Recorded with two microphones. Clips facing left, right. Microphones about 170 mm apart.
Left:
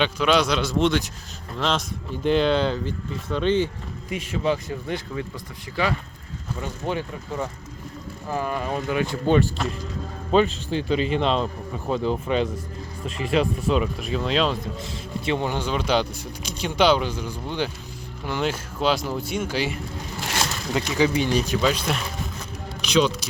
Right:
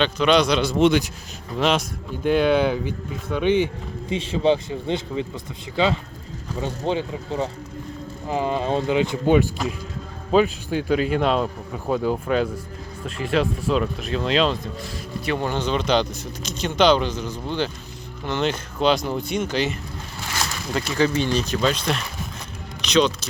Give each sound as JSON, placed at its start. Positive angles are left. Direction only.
{"t": 0.0, "sound": "speech", "side_deg": 5}
{"t": 1.5, "sound": "speech", "side_deg": -10}
{"t": 4.1, "sound": "speech", "side_deg": -25}
{"t": 14.8, "sound": "speech", "side_deg": 25}